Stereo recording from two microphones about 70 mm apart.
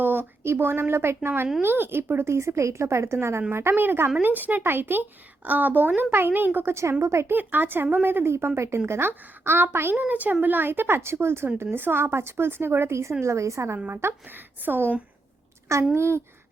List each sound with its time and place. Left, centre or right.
0.0 s a woman's voice: right
7.3 s speech: right
10.0 s a woman's voice: right
13.9 s speech: right
16.0 s speech: right